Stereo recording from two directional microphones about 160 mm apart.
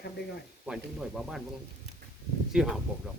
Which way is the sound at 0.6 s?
5° right (ahead or behind).